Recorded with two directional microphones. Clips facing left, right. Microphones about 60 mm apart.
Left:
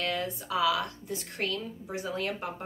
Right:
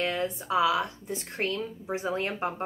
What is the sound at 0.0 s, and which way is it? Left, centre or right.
Speech, right.